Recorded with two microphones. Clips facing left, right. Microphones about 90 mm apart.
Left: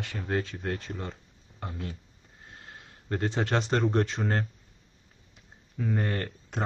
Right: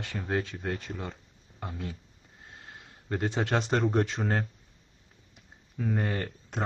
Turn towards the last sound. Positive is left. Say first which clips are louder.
# even
turn(degrees=0)  # may be behind; listen again after turning